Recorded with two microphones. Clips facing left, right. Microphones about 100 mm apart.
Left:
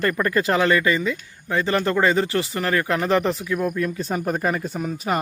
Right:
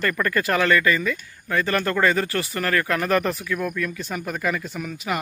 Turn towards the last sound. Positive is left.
turn(degrees=35)  # may be behind; listen again after turning